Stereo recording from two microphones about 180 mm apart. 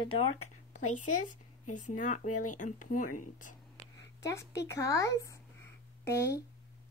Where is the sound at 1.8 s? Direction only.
45° left (ahead or behind).